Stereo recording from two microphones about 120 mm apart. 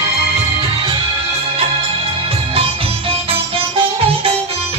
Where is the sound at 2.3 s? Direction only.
50° right (ahead or behind).